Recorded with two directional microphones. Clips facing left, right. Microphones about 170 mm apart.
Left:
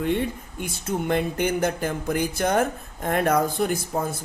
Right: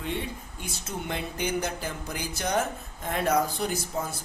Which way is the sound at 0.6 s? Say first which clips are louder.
Left 9 dB; 55° left (ahead or behind).